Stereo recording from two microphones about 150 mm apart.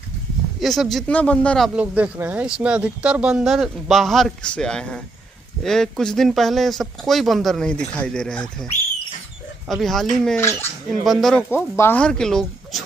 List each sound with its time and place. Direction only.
0.6 s speech: centre (ahead or behind)
1.8 s speech: 10° right (ahead or behind)
9.7 s speech: centre (ahead or behind)
10.4 s speech: 20° left (ahead or behind)
10.9 s speech: centre (ahead or behind)
11.5 s speech: 15° left (ahead or behind)
12.0 s speech: 5° left (ahead or behind)